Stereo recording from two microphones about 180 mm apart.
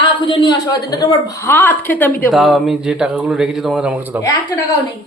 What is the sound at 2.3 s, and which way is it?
Speech, centre (ahead or behind).